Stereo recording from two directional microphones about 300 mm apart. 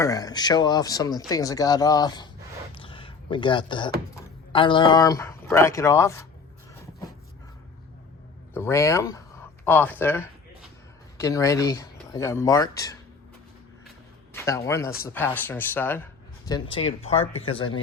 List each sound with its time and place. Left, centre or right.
0.0 s speech: centre
2.7 s a sound: centre
4.1 s speech: centre
8.5 s speech: centre
10.0 s a sound: centre
11.2 s speech: centre
14.3 s a man's voice: centre